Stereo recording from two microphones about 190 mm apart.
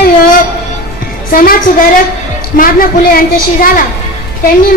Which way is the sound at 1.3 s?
50° left (ahead or behind).